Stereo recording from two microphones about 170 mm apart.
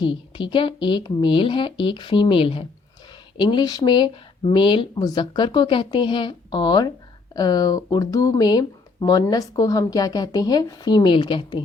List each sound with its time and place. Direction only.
0.0 s a woman's voice: 30° left (ahead or behind)